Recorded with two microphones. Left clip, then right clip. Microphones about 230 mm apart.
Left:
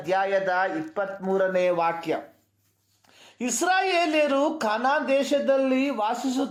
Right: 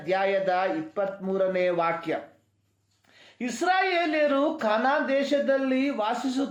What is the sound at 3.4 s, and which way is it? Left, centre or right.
A man's voice, left.